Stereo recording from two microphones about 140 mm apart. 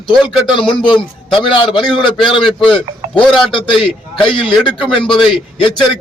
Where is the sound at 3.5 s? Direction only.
40° left (ahead or behind).